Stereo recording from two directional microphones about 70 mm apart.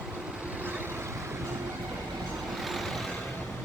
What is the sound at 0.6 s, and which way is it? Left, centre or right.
Vehicle, right.